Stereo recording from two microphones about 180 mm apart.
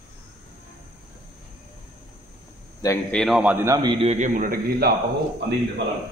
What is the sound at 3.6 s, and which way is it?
Speech, 20° right (ahead or behind).